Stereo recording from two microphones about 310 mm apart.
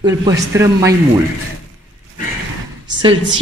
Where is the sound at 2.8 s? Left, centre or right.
Centre.